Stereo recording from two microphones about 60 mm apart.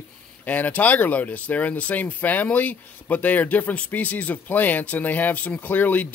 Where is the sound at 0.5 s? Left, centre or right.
Left.